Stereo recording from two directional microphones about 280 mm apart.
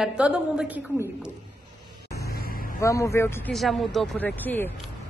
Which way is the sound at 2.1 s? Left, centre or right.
Left.